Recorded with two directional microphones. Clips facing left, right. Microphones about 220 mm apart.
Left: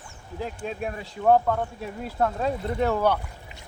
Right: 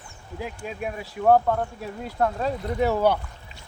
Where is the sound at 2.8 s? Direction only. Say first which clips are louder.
Right 2 dB; 10° right (ahead or behind).